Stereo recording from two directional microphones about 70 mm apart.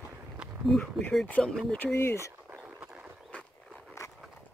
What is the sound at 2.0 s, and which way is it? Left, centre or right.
Speech, left.